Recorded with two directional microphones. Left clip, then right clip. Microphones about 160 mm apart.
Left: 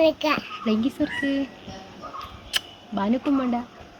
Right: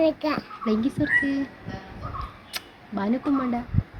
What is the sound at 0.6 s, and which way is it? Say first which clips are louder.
Speech: even; 20° left (ahead or behind).